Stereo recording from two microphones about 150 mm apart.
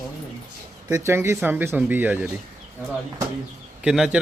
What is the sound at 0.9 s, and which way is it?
Speech, 15° right (ahead or behind).